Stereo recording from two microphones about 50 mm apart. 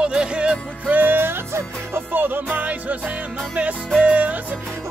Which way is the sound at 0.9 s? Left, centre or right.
Right.